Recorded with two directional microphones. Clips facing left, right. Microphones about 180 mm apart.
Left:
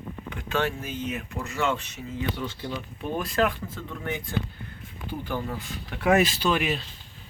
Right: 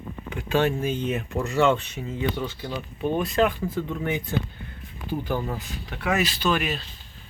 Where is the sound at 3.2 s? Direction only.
Centre (ahead or behind).